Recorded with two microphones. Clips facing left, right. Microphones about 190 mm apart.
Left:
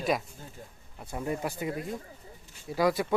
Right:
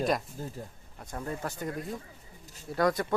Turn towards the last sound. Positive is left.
turn(degrees=5)  # may be behind; listen again after turning